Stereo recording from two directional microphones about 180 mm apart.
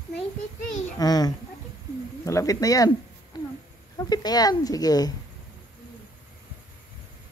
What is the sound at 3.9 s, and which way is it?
Speech, 20° left (ahead or behind).